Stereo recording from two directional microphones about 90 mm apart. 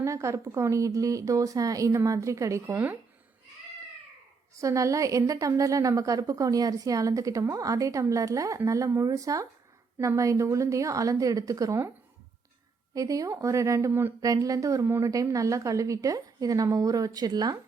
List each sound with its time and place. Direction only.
0.0 s a woman's voice: 35° right (ahead or behind)
2.7 s speech: 20° right (ahead or behind)
4.5 s a woman's voice: 35° right (ahead or behind)
12.9 s a woman's voice: 40° right (ahead or behind)
14.2 s a woman's voice: 40° right (ahead or behind)